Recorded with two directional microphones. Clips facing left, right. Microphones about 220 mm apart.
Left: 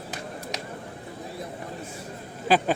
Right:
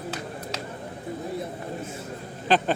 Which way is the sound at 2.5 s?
10° left (ahead or behind).